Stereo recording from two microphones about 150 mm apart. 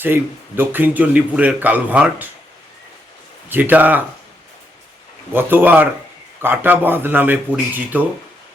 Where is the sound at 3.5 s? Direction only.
10° right (ahead or behind).